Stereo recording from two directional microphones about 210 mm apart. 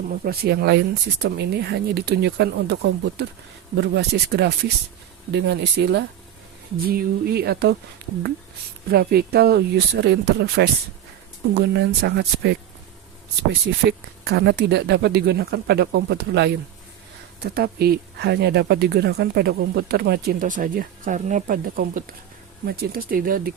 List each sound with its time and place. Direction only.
0.1 s speech: 50° right (ahead or behind)
8.9 s speech: 45° right (ahead or behind)
13.7 s speech: 55° right (ahead or behind)